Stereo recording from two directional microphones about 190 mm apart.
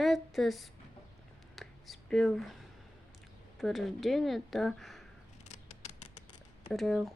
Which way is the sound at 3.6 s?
Centre (ahead or behind).